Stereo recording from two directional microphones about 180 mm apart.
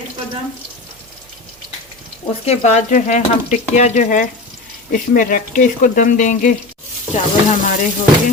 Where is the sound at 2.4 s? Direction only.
40° left (ahead or behind).